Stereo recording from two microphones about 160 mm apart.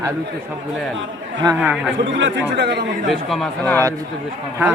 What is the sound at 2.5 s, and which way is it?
Speech, 90° right.